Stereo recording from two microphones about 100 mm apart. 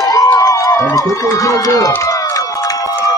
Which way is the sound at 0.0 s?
40° left (ahead or behind).